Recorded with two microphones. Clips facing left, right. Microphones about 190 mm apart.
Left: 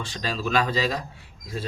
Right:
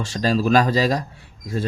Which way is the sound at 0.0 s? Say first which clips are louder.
Right 9 dB; 40° right (ahead or behind).